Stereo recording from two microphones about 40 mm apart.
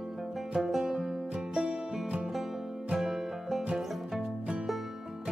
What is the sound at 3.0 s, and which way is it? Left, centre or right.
Music, centre.